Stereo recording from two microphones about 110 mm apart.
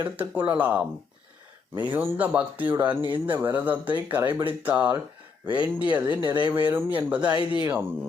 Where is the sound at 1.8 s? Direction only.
15° right (ahead or behind).